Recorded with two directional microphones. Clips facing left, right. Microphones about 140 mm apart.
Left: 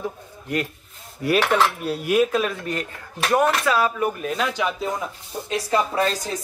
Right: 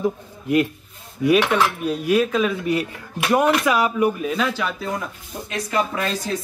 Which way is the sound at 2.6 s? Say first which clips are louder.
Right 6 dB; 10° right (ahead or behind).